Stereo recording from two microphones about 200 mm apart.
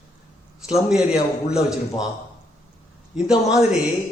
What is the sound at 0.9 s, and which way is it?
Speech, 5° right (ahead or behind).